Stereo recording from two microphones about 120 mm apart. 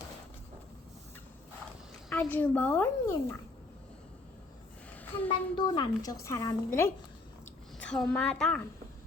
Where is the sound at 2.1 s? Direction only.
15° left (ahead or behind).